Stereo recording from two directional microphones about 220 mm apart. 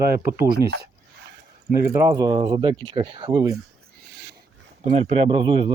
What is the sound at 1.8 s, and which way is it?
Speech, 15° right (ahead or behind).